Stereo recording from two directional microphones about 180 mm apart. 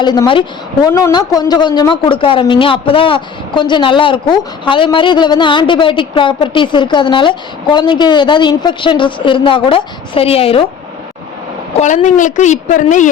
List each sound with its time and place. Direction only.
0.0 s speech: 25° left (ahead or behind)
11.8 s a woman's voice: 45° left (ahead or behind)